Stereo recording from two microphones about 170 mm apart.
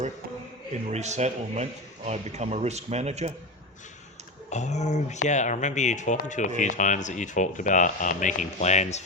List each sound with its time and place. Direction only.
0.7 s speech: 40° right (ahead or behind)
4.4 s speech: 45° left (ahead or behind)